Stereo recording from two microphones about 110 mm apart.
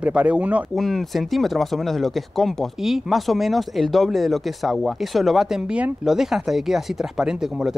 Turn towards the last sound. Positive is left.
turn(degrees=-5)  # may be behind; listen again after turning